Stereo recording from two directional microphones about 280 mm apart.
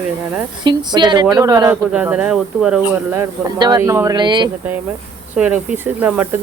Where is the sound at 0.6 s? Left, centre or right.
Centre.